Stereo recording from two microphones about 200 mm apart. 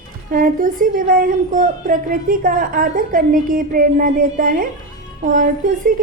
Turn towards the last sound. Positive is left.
turn(degrees=-40)  # may be behind; listen again after turning